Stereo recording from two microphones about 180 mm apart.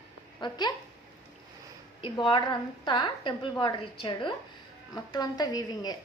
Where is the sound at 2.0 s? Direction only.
30° left (ahead or behind).